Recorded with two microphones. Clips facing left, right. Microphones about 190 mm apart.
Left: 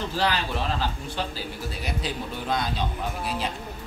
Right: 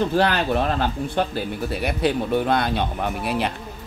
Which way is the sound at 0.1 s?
55° right (ahead or behind).